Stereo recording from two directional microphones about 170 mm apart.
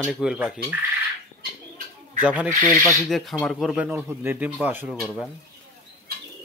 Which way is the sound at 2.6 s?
15° left (ahead or behind).